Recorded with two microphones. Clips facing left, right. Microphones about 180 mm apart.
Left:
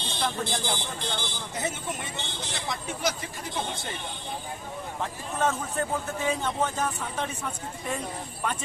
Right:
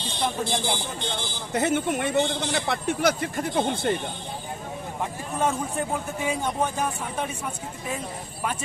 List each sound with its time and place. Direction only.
0.2 s speech: 20° right (ahead or behind)
1.0 s speech: centre (ahead or behind)
1.5 s a man's voice: 65° right (ahead or behind)
5.4 s speech: 10° right (ahead or behind)